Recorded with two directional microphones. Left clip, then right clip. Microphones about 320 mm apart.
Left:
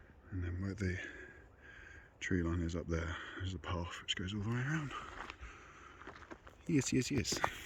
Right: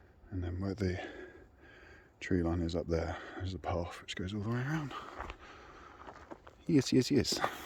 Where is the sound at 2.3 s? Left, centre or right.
Centre.